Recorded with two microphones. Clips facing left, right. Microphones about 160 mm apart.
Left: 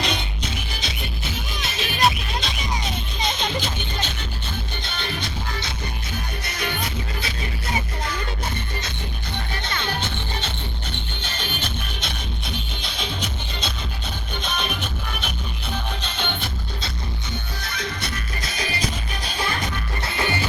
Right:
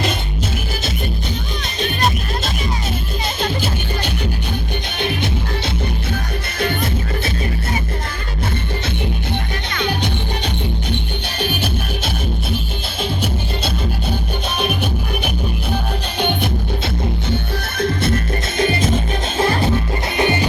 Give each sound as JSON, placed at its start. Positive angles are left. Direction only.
{"t": 1.6, "sound": "music", "side_deg": 5}
{"t": 4.9, "sound": "music", "side_deg": -60}
{"t": 9.8, "sound": "music", "side_deg": -15}
{"t": 16.4, "sound": "music", "side_deg": -55}
{"t": 19.6, "sound": "music", "side_deg": -25}